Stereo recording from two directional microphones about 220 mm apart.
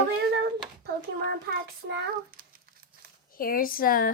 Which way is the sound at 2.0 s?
40° right (ahead or behind).